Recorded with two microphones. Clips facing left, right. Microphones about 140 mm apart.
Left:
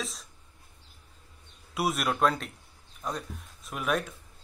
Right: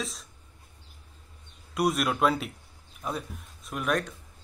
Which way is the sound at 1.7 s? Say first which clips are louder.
Right 3 dB; centre (ahead or behind).